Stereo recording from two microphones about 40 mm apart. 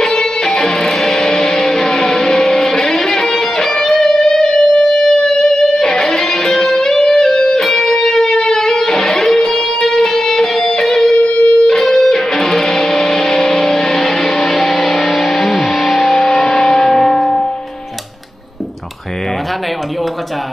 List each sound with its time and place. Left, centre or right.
0.0 s music: centre
11.1 s music: left
11.4 s music: centre
14.1 s music: left
15.4 s music: centre
16.4 s church bell: centre